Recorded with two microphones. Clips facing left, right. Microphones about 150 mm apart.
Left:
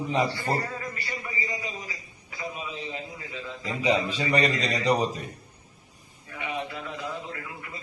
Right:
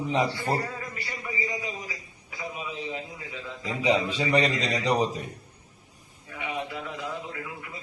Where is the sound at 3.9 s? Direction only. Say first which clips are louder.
Right 1 dB; 15° right (ahead or behind).